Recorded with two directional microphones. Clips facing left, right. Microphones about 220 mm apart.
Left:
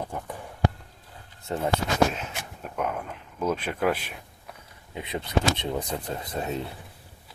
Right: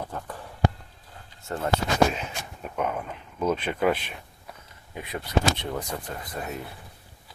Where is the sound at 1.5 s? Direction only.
15° left (ahead or behind).